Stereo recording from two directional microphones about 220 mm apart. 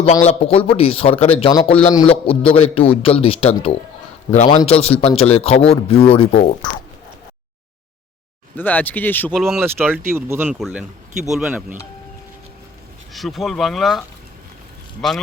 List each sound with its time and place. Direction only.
0.0 s a man's voice: 30° left (ahead or behind)
8.5 s speech: 5° left (ahead or behind)
13.1 s speech: centre (ahead or behind)